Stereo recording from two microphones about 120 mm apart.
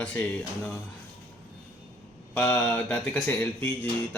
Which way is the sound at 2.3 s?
20° left (ahead or behind).